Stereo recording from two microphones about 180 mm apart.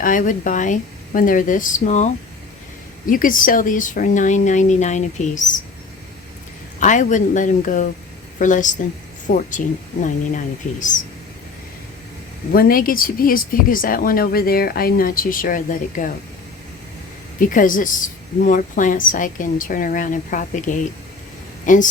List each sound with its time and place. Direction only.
0.0 s speech: 45° left (ahead or behind)
3.1 s speech: 50° left (ahead or behind)
6.7 s speech: 45° left (ahead or behind)
12.5 s speech: 55° left (ahead or behind)
17.4 s speech: 50° left (ahead or behind)